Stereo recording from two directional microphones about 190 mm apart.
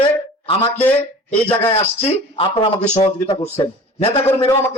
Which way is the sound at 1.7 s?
30° left (ahead or behind).